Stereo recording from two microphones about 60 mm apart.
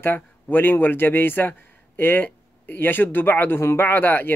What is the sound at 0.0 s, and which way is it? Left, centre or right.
Speech, left.